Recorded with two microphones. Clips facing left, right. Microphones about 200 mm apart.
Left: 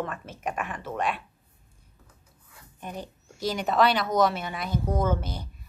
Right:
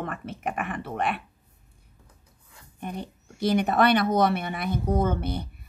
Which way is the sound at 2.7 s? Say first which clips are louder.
Right 3 dB; 60° right (ahead or behind).